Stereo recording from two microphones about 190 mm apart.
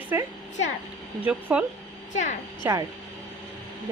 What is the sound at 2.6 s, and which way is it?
Speech, 20° right (ahead or behind).